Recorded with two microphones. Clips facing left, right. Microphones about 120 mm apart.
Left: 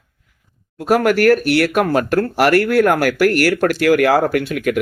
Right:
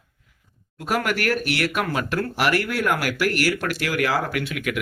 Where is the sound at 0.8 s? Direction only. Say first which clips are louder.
Left 10 dB; 45° left (ahead or behind).